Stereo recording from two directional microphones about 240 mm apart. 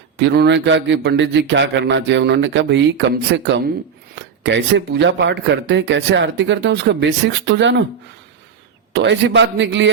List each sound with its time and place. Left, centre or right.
0.2 s speech: right
8.9 s speech: right